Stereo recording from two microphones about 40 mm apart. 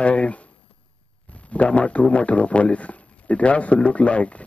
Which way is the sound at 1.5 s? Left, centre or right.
Left.